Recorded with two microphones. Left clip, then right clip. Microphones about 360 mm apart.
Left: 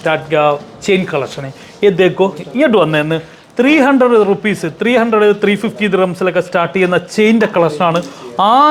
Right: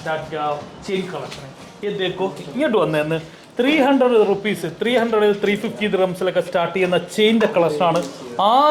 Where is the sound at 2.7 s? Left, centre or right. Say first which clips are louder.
Left 4 dB; left.